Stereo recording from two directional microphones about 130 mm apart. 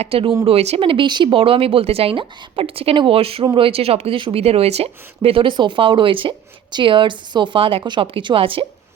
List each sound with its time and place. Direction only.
0.0 s speech: 45° right (ahead or behind)